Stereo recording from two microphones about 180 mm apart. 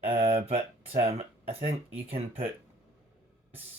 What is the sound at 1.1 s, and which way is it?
Speech, 35° right (ahead or behind).